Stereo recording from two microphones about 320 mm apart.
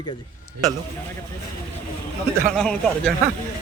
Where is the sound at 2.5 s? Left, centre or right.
Centre.